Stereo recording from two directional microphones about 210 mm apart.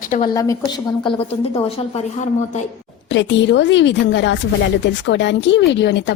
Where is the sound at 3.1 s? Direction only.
60° left (ahead or behind).